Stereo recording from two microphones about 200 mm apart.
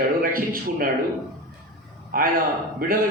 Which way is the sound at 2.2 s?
45° right (ahead or behind).